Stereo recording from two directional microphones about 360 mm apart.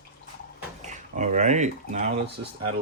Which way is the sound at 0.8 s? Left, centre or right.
Centre.